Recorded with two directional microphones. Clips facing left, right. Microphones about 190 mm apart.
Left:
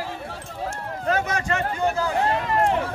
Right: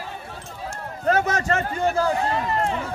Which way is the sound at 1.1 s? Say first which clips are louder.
Right 3 dB; 40° right (ahead or behind).